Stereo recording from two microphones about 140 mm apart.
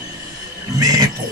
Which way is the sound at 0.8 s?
30° right (ahead or behind).